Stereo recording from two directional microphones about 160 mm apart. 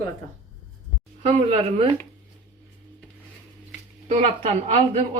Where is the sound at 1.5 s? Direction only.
35° right (ahead or behind).